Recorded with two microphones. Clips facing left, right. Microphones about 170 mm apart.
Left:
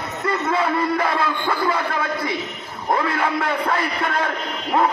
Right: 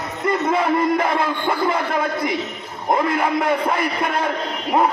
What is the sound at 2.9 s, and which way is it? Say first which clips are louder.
A man's voice: right 2 dB; 15° right (ahead or behind).